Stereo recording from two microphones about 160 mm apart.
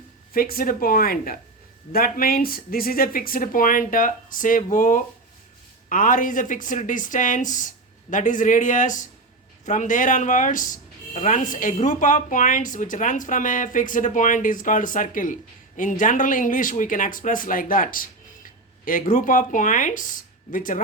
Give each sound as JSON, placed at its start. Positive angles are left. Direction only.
{"t": 0.3, "sound": "speech", "side_deg": 65}